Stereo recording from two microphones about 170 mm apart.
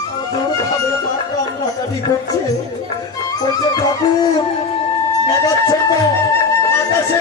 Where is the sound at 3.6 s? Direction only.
25° left (ahead or behind).